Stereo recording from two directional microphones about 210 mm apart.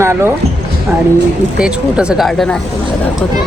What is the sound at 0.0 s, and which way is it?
Speech, 10° right (ahead or behind).